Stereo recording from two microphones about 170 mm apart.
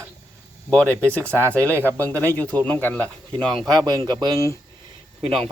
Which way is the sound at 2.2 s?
10° left (ahead or behind).